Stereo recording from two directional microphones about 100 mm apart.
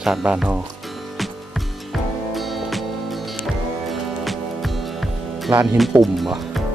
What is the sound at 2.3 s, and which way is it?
Music, centre (ahead or behind).